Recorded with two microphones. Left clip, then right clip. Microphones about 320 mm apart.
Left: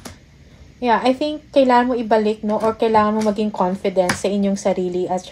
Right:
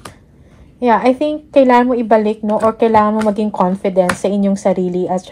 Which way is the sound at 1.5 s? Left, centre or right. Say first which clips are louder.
Right 4 dB; right.